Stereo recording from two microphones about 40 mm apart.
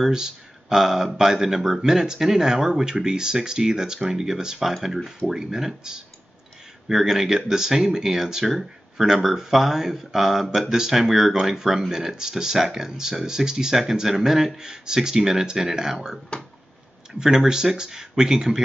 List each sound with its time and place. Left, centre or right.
0.0 s speech: centre